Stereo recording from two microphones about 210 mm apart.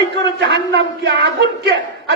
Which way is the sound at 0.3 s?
55° right (ahead or behind).